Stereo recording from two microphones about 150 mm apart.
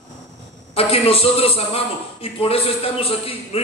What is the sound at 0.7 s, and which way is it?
A man's voice, 40° left (ahead or behind).